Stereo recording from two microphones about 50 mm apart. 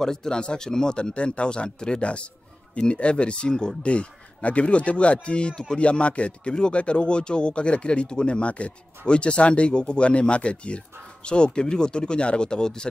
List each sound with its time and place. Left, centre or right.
0.0 s speech: centre